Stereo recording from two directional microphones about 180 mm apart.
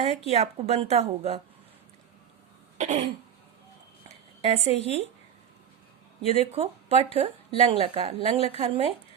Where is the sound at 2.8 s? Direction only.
40° right (ahead or behind).